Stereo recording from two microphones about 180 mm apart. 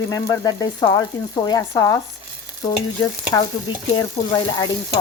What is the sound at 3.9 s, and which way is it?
Frying, 25° left (ahead or behind).